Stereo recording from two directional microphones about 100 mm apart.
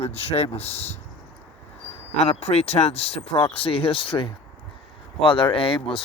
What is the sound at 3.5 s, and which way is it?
Speech, 70° left (ahead or behind).